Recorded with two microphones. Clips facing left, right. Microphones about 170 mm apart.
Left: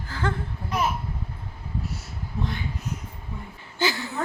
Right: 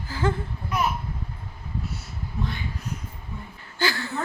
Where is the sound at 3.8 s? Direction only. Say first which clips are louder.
Left 1 dB; 20° left (ahead or behind).